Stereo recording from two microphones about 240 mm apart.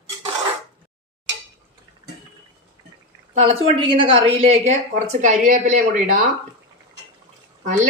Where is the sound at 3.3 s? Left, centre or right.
Right.